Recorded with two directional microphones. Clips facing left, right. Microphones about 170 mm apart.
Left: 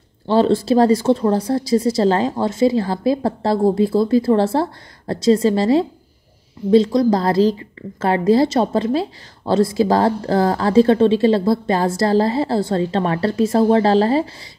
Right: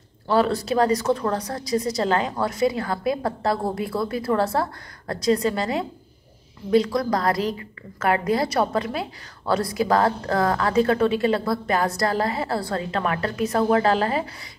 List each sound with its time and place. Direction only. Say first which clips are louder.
0.3 s a woman's voice: left 6 dB; 25° left (ahead or behind)